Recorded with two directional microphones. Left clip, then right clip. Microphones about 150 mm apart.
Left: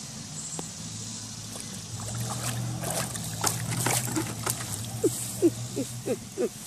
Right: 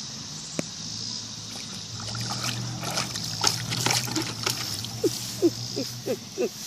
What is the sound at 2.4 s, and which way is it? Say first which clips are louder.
Boat: right 3 dB; centre (ahead or behind).